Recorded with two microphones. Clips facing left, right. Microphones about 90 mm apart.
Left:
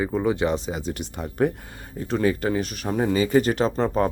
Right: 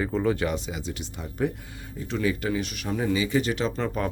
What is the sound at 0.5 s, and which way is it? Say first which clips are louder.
Speech: left 4 dB; 40° left (ahead or behind).